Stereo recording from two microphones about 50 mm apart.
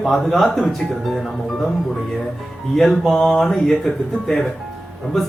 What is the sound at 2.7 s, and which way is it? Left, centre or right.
Mantra, centre.